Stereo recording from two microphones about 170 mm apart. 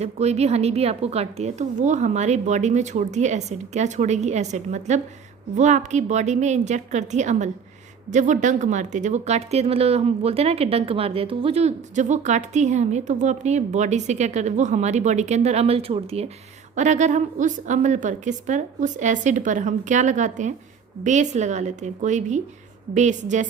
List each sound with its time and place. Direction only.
0.0 s a woman's voice: 40° right (ahead or behind)